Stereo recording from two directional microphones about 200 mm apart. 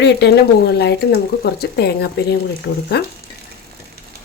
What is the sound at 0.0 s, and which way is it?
Speech, 60° left (ahead or behind).